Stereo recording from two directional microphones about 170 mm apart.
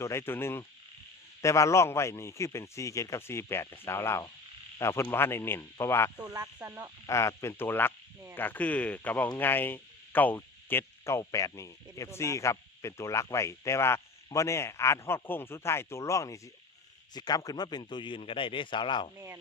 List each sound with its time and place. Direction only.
0.0 s speech: 15° left (ahead or behind)
6.2 s speech: 20° right (ahead or behind)
7.1 s a man's voice: 15° left (ahead or behind)